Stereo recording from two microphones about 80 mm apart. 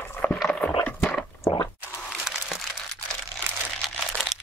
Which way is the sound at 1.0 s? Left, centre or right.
Centre.